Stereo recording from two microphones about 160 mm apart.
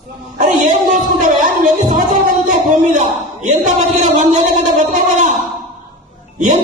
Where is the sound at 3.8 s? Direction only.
45° right (ahead or behind).